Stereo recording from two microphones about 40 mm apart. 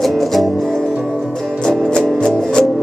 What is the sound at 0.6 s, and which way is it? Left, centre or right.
Music, centre.